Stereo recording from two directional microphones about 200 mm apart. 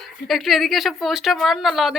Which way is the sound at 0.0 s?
Centre (ahead or behind).